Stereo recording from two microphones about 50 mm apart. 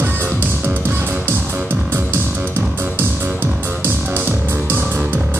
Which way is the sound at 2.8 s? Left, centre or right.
Right.